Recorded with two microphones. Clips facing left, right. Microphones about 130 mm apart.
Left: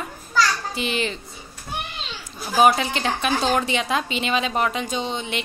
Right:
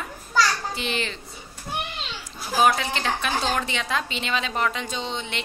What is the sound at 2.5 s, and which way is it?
A woman's voice, 20° left (ahead or behind).